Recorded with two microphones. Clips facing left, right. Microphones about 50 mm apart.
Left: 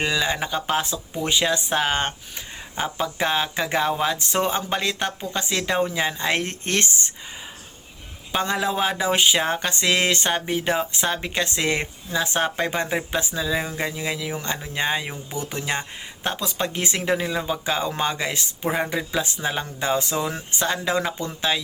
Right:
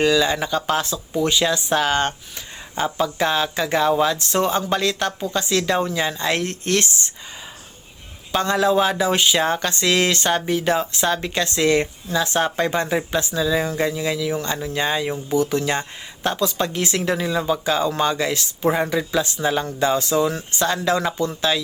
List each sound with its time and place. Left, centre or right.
0.0 s speech: left
8.3 s speech: centre
18.6 s speech: centre
18.9 s speech: centre